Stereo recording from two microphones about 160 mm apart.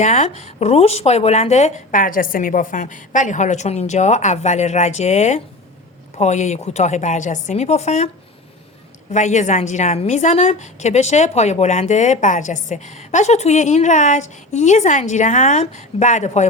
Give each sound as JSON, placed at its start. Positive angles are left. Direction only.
{"t": 0.0, "sound": "a woman's voice", "side_deg": 50}
{"t": 9.1, "sound": "a woman's voice", "side_deg": 50}